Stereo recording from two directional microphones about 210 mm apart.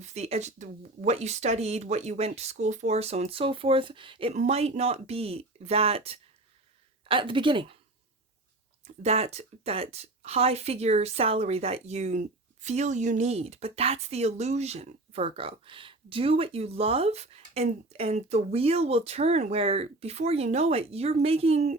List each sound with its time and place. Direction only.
0.0 s speech: 30° right (ahead or behind)
8.8 s speech: 30° right (ahead or behind)